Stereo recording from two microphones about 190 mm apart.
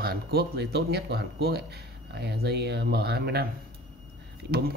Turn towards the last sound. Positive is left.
turn(degrees=-55)  # may be behind; listen again after turning